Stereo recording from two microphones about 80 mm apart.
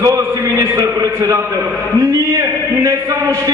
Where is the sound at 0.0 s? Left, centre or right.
Right.